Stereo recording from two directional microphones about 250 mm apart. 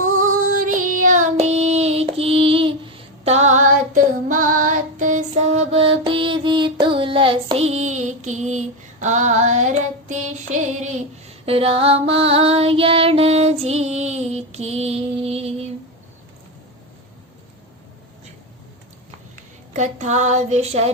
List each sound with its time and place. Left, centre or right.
0.2 s female singing: right
0.9 s child singing: right
11.4 s female singing: right
19.7 s a sound: right